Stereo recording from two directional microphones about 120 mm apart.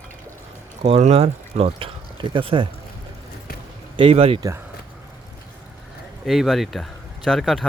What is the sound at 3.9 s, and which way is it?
Speech, 50° right (ahead or behind).